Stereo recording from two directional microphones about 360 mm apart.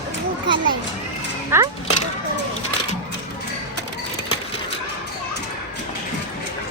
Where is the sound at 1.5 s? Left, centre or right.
Centre.